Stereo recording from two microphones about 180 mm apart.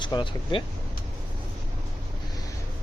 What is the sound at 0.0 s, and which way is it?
Speech, 25° left (ahead or behind).